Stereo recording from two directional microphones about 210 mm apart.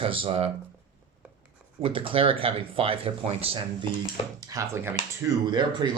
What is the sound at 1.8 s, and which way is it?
Speech, 25° right (ahead or behind).